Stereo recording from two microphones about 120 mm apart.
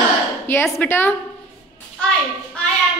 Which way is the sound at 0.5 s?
20° left (ahead or behind).